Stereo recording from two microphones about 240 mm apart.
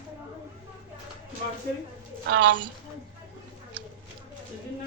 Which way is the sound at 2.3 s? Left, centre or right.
Right.